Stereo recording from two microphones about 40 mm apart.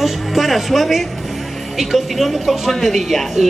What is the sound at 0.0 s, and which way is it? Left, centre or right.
Speech, centre.